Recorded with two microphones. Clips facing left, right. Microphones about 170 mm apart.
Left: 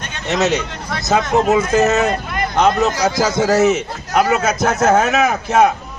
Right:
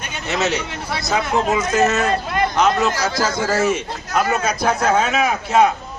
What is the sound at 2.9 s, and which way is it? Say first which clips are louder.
Speech: left 4 dB; 15° left (ahead or behind).